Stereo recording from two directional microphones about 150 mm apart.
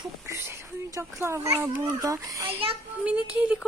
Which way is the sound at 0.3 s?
15° right (ahead or behind).